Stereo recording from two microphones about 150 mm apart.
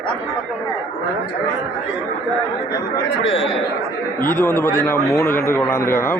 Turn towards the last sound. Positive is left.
turn(degrees=15)  # may be behind; listen again after turning